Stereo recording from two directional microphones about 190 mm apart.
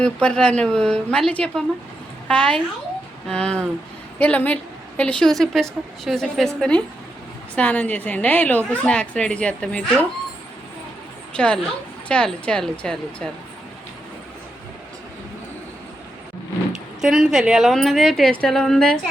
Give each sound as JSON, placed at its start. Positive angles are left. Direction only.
{"t": 0.0, "sound": "a woman's voice", "side_deg": 5}
{"t": 11.3, "sound": "a woman's voice", "side_deg": 5}
{"t": 17.0, "sound": "a woman's voice", "side_deg": -5}